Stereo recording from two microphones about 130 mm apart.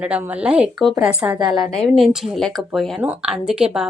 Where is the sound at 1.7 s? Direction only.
Centre (ahead or behind).